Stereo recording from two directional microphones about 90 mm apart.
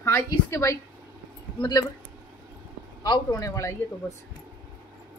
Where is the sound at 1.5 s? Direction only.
55° left (ahead or behind).